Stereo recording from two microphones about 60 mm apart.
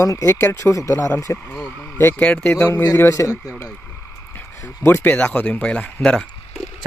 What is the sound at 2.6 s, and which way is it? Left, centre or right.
Speech, left.